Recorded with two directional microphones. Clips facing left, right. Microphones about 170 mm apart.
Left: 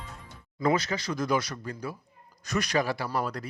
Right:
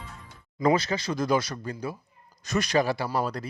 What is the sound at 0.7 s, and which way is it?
Speech, 30° right (ahead or behind).